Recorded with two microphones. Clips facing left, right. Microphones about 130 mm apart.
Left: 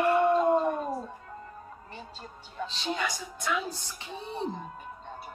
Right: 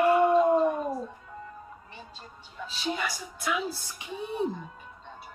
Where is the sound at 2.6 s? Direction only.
5° right (ahead or behind).